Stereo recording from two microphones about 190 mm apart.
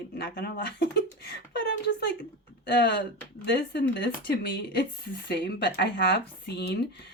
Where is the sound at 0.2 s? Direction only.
55° left (ahead or behind).